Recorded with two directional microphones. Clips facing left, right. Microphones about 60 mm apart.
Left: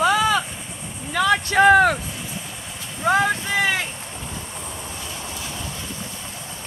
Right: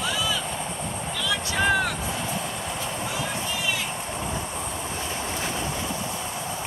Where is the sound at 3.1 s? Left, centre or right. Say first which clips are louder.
Left 10 dB; left.